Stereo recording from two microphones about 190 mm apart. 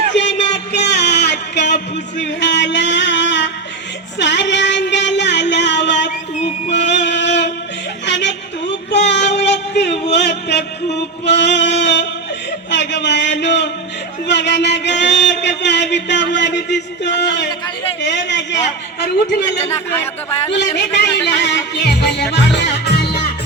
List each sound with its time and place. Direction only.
0.1 s a sound: 70° left (ahead or behind)
4.2 s music: 70° left (ahead or behind)
6.8 s a sound: 65° left (ahead or behind)
8.0 s music: 65° left (ahead or behind)
11.3 s a sound: 65° left (ahead or behind)
14.3 s speech: 65° left (ahead or behind)
16.3 s music: 65° left (ahead or behind)
18.0 s speech: 70° left (ahead or behind)
19.5 s a man's voice: 10° left (ahead or behind)
20.7 s music: 65° left (ahead or behind)